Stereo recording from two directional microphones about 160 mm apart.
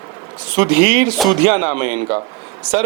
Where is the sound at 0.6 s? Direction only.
10° right (ahead or behind).